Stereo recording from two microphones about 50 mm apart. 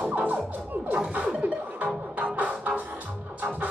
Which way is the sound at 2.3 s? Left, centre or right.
Right.